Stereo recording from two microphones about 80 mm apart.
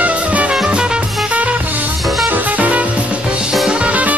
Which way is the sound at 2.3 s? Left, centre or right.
Centre.